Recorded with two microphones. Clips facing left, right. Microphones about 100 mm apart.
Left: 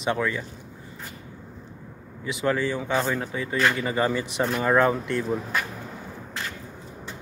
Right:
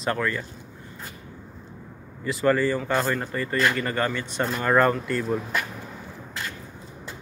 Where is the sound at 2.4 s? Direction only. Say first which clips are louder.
Right 3 dB; centre (ahead or behind).